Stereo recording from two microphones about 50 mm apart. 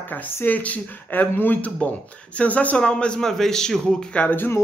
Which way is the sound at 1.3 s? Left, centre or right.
Left.